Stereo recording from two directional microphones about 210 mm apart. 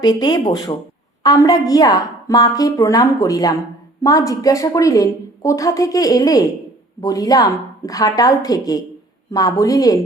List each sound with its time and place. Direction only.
0.0 s a woman's voice: 20° left (ahead or behind)